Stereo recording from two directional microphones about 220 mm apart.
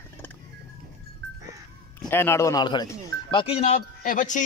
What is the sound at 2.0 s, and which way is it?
A man's voice, 10° left (ahead or behind).